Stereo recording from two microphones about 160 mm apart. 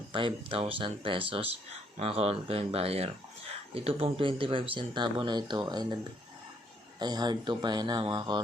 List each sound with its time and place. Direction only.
0.1 s speech: 30° right (ahead or behind)
7.0 s speech: 25° right (ahead or behind)